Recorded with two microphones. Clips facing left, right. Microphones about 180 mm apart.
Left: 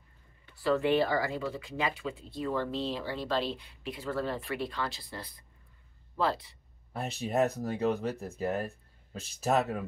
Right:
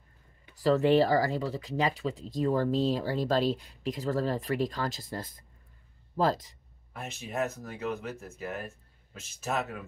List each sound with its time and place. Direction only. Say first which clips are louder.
0.6 s speech: right 4 dB; 40° right (ahead or behind)
6.9 s speech: left 5 dB; 35° left (ahead or behind)